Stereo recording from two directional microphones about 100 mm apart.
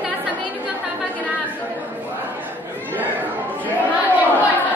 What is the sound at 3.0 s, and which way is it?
Chatter, 15° right (ahead or behind).